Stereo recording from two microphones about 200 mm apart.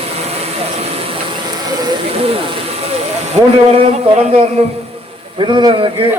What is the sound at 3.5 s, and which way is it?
A man's voice, 30° right (ahead or behind).